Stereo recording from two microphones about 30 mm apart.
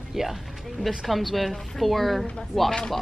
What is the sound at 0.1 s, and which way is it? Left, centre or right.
Speech, centre.